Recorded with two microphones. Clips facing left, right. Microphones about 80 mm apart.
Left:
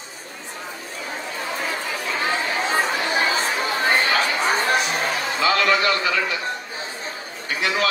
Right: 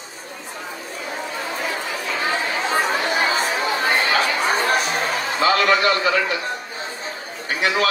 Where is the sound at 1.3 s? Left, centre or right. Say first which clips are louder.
Even; right.